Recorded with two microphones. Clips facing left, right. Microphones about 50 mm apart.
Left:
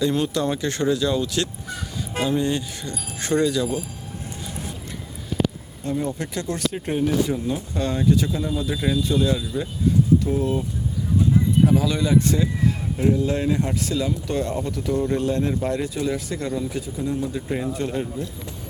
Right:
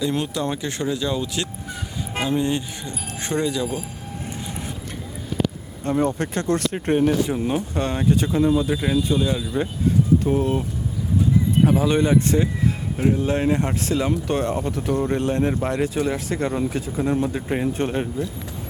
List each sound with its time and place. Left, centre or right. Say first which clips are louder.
0.1 s speech: left 2 dB; centre
5.8 s speech: right 4 dB; right
8.7 s speech: right 1 dB; centre
10.2 s speech: right 2 dB; right
11.6 s speech: right 2 dB; right
14.9 s speech: even; right